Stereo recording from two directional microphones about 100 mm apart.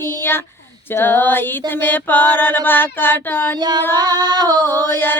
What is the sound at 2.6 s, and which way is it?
Female singing, 20° left (ahead or behind).